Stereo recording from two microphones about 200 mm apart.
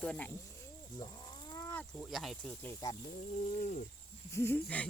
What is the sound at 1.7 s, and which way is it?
Speech, centre (ahead or behind).